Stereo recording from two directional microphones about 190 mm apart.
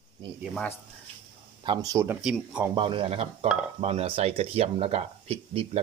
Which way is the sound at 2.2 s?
5° right (ahead or behind).